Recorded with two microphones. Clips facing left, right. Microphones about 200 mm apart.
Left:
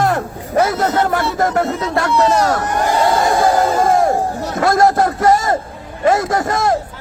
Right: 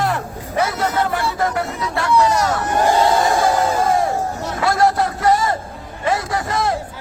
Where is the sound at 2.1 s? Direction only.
25° left (ahead or behind).